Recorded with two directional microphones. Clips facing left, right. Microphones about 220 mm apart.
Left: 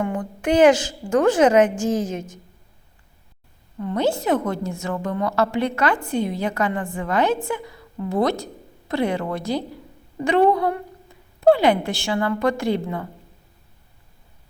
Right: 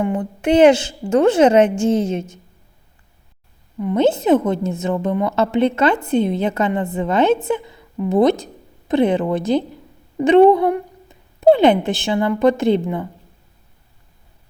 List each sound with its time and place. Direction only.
0.0 s a woman's voice: 20° right (ahead or behind)
3.8 s a woman's voice: 20° right (ahead or behind)